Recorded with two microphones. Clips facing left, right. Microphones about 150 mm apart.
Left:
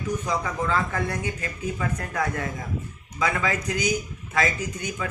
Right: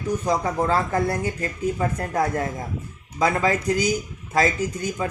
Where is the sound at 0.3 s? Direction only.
40° right (ahead or behind).